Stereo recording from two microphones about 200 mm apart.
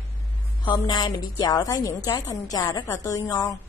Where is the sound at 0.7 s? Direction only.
20° left (ahead or behind).